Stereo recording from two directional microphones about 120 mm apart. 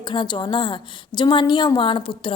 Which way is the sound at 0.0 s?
40° left (ahead or behind).